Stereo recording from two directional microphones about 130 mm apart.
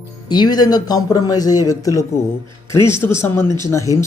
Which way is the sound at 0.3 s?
30° left (ahead or behind).